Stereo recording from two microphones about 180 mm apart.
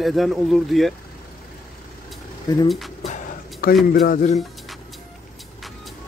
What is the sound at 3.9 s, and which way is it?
Speech, 45° left (ahead or behind).